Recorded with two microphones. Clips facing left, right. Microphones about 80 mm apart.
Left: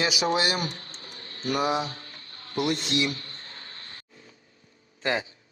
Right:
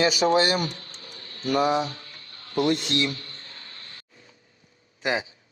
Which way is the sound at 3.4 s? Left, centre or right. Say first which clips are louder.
Left 1 dB; left.